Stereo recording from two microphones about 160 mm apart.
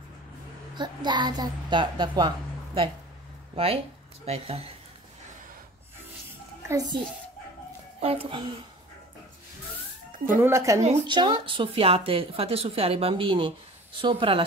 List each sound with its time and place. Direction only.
0.7 s a child's voice: 30° right (ahead or behind)
8.0 s a woman's voice: 35° right (ahead or behind)
10.1 s speech: 55° right (ahead or behind)
10.4 s speech: 20° right (ahead or behind)
11.1 s a woman's voice: 30° right (ahead or behind)